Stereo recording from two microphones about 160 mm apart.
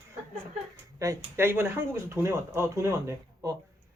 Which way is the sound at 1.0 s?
20° right (ahead or behind).